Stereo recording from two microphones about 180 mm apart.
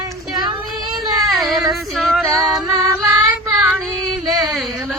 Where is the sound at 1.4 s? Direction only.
Centre (ahead or behind).